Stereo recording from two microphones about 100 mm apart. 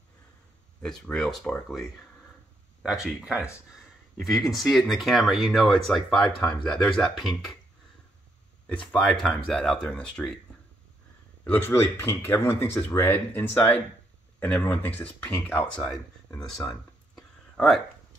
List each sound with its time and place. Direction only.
1.1 s speech: 5° left (ahead or behind)
8.6 s speech: 10° left (ahead or behind)
11.4 s speech: 20° left (ahead or behind)